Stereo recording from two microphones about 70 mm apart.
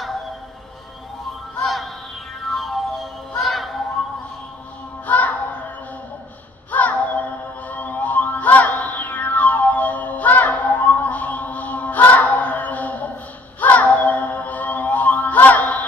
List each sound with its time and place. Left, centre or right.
1.6 s music: centre
3.4 s a sound: centre
5.0 s child singing: left
6.7 s child singing: left
7.6 s music: left